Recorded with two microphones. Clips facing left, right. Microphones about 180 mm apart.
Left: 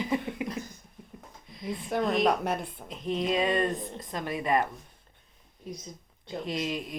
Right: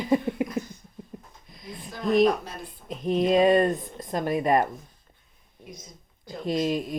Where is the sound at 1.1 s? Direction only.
50° right (ahead or behind).